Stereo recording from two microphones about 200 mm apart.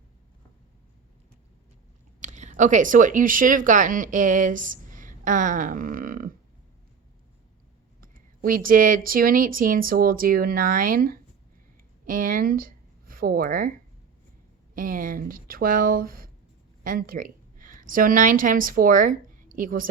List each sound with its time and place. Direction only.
2.2 s speech: 35° right (ahead or behind)
8.0 s speech: 45° right (ahead or behind)
14.8 s a woman's voice: 45° right (ahead or behind)